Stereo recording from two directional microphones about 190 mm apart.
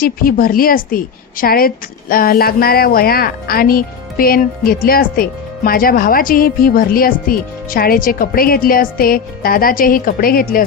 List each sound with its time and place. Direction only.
0.0 s speech: 50° left (ahead or behind)